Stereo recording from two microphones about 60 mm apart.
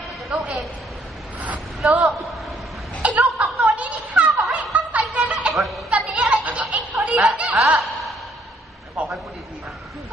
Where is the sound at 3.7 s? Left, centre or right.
Right.